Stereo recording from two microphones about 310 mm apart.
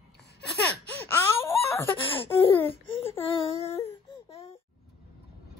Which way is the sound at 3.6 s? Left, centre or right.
Centre.